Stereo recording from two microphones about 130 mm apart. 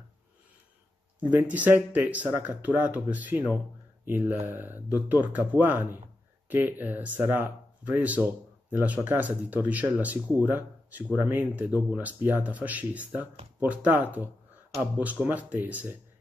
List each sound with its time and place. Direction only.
1.3 s speech: 10° right (ahead or behind)